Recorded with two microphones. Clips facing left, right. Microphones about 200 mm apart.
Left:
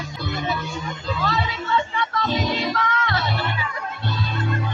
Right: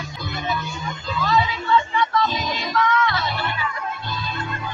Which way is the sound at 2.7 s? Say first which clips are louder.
Right 4 dB; 35° left (ahead or behind).